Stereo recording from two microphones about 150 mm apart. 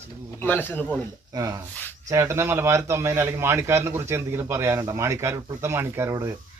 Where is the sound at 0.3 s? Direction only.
10° left (ahead or behind).